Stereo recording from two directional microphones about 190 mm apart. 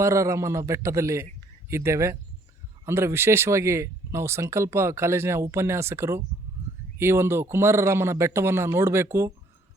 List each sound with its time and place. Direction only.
0.0 s speech: 15° right (ahead or behind)